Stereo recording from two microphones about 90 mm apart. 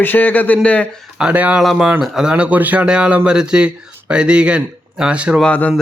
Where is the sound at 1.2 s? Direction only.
15° right (ahead or behind).